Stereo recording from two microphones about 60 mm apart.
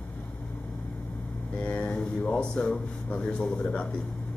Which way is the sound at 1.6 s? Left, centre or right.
Centre.